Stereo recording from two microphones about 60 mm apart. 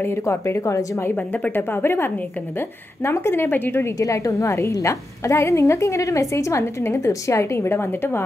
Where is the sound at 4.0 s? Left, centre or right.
Left.